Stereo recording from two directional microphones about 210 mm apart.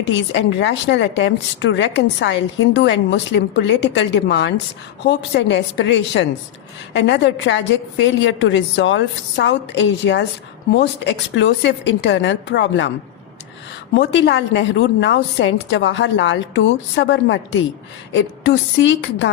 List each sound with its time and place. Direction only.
0.0 s a woman's voice: 60° left (ahead or behind)
13.9 s a woman's voice: 60° left (ahead or behind)